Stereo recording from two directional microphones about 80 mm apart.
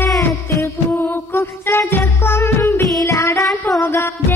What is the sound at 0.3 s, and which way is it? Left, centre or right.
Music, left.